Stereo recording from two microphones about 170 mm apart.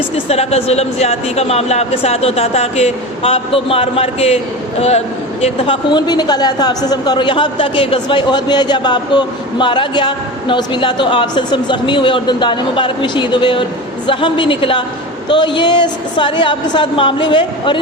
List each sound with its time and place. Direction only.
0.3 s speech: 40° left (ahead or behind)
5.9 s a woman's voice: 25° left (ahead or behind)